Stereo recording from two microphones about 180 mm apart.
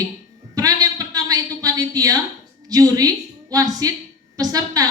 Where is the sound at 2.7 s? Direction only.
20° right (ahead or behind).